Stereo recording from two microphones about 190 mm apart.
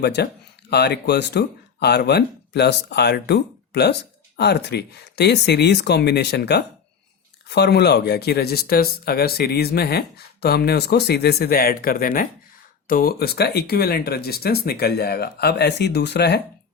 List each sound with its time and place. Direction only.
0.0 s speech: 60° left (ahead or behind)